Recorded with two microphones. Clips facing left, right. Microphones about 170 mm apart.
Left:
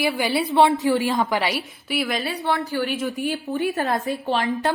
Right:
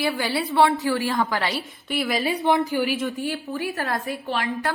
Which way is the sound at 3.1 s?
20° left (ahead or behind).